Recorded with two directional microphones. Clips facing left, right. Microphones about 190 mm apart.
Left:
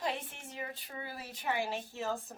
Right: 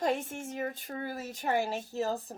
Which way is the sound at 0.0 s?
45° right (ahead or behind).